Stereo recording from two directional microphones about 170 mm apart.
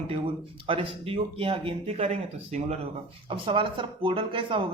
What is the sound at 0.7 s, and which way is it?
A woman's voice, 35° right (ahead or behind).